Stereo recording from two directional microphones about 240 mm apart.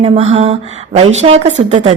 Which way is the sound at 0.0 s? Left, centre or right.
Right.